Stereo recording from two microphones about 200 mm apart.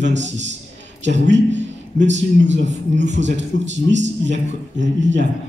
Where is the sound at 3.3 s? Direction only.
65° right (ahead or behind).